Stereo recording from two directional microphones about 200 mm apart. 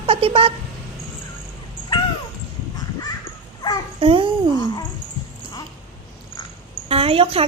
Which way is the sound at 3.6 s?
20° left (ahead or behind).